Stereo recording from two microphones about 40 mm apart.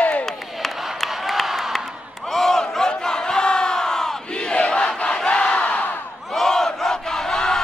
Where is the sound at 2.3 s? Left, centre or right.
Centre.